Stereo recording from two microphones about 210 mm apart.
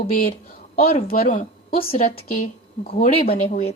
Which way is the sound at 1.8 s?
30° left (ahead or behind).